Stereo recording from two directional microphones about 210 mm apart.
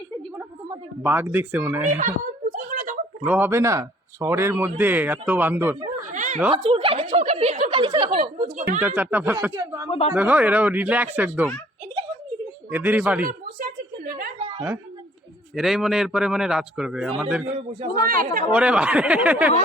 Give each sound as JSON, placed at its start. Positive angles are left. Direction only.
{"t": 0.3, "sound": "speech", "side_deg": -10}
{"t": 2.0, "sound": "a sound", "side_deg": -40}
{"t": 3.2, "sound": "a man's voice", "side_deg": -10}
{"t": 6.1, "sound": "a sound", "side_deg": -35}
{"t": 6.5, "sound": "a woman's voice", "side_deg": -25}
{"t": 8.4, "sound": "speech", "side_deg": -35}
{"t": 9.0, "sound": "a man's voice", "side_deg": -10}
{"t": 12.7, "sound": "a man's voice", "side_deg": -10}
{"t": 14.3, "sound": "a sound", "side_deg": -30}
{"t": 15.5, "sound": "a man's voice", "side_deg": 0}
{"t": 18.0, "sound": "speech", "side_deg": -45}
{"t": 18.5, "sound": "a man's voice", "side_deg": -5}